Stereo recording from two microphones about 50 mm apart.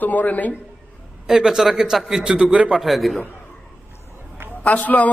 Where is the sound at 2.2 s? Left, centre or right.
Centre.